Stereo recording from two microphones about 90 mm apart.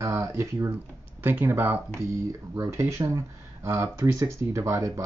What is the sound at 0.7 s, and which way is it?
Speech, 20° right (ahead or behind).